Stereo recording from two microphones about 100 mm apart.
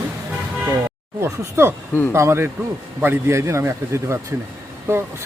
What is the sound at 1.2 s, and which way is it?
Speech, 25° right (ahead or behind).